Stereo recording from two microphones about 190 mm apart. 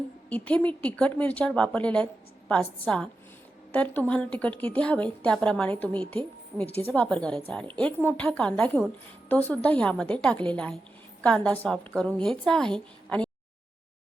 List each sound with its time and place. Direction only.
0.3 s a woman's voice: 5° left (ahead or behind)